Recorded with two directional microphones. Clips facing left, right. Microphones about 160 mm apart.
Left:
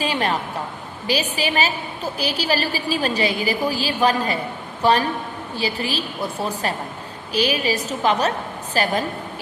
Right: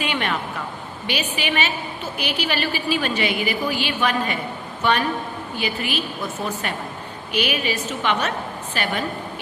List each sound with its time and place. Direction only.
0.0 s a woman's voice: 35° left (ahead or behind)